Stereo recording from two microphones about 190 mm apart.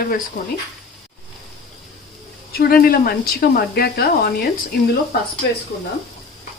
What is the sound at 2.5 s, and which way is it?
Speech, 50° left (ahead or behind).